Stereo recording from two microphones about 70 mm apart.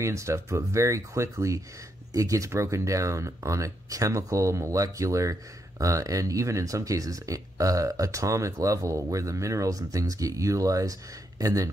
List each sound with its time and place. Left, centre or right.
0.0 s speech: right